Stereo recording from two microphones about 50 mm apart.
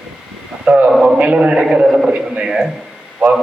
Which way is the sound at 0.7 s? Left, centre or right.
Right.